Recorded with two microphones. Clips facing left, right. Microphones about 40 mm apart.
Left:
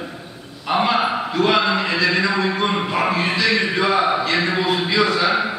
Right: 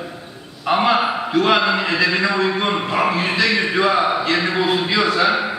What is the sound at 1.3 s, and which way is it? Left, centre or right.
A man's voice, centre.